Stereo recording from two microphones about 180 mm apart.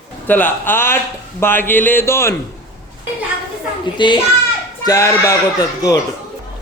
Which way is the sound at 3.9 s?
25° left (ahead or behind).